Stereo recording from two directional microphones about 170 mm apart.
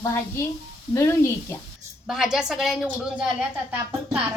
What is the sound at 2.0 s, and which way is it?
A woman's voice, 5° right (ahead or behind).